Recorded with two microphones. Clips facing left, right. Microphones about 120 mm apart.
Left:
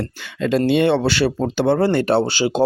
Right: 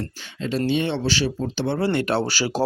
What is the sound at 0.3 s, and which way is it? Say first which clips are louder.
Speech: left 6 dB; 60° left (ahead or behind).